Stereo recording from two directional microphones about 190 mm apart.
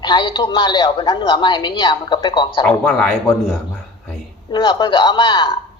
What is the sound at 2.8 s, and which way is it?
Speech, centre (ahead or behind).